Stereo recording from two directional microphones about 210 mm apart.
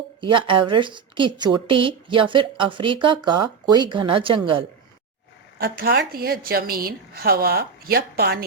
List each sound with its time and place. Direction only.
0.2 s a woman's voice: 25° right (ahead or behind)
5.5 s a woman's voice: 45° right (ahead or behind)